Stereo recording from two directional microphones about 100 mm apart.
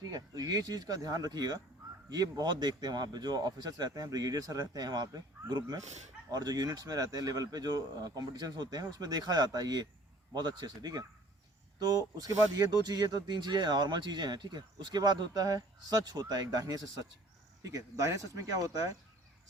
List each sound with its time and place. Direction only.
0.0 s speech: 40° right (ahead or behind)